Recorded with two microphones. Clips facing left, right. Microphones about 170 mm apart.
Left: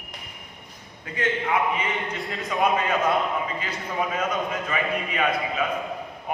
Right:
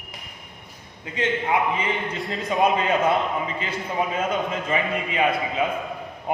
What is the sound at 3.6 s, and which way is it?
A man's voice, 25° right (ahead or behind).